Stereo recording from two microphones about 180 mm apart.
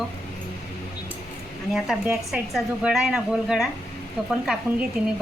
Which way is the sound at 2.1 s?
Centre (ahead or behind).